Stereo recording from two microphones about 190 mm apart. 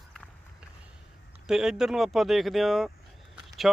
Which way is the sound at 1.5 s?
5° right (ahead or behind).